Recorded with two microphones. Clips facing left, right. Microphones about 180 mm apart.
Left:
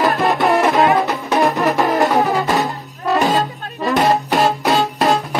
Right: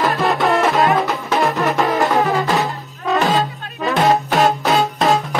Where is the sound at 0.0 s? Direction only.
20° left (ahead or behind).